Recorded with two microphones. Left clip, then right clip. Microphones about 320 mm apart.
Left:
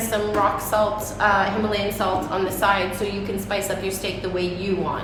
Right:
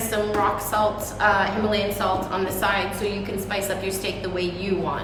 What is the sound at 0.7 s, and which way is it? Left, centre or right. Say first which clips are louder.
A woman's voice: left 1 dB; centre.